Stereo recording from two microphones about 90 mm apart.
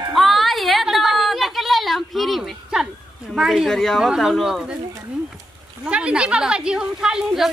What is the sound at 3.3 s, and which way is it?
A woman's voice, 5° right (ahead or behind).